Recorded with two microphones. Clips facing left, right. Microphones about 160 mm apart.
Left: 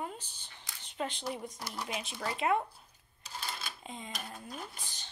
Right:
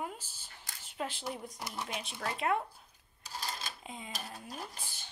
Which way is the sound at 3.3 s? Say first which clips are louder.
Right 1 dB; 35° right (ahead or behind).